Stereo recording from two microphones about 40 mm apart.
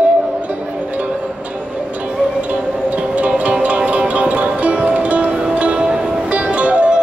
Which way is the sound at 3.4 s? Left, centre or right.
Right.